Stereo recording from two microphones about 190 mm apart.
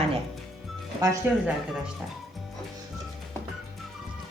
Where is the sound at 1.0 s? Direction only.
15° right (ahead or behind).